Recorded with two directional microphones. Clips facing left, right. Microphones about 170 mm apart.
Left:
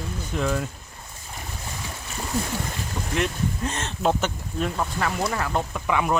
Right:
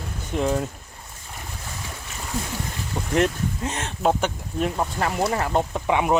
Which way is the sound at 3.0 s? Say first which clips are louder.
Right 3 dB; 35° right (ahead or behind).